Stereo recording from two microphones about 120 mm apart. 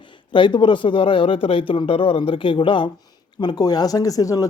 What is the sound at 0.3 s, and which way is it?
A man's voice, 40° left (ahead or behind).